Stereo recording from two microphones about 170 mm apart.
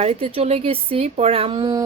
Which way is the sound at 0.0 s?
35° right (ahead or behind).